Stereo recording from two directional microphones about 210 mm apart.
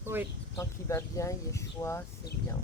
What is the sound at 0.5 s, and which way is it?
Speech, 15° left (ahead or behind).